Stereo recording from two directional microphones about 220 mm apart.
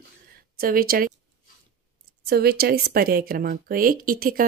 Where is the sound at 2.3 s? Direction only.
45° right (ahead or behind).